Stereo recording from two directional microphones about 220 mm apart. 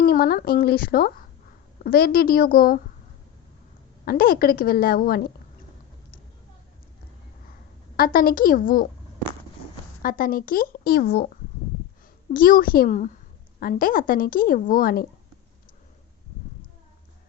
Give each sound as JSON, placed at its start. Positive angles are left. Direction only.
{"t": 0.0, "sound": "a woman's voice", "side_deg": 40}
{"t": 4.0, "sound": "a woman's voice", "side_deg": 40}
{"t": 7.9, "sound": "a woman's voice", "side_deg": 40}
{"t": 10.0, "sound": "a woman's voice", "side_deg": 40}
{"t": 12.3, "sound": "a woman's voice", "side_deg": 40}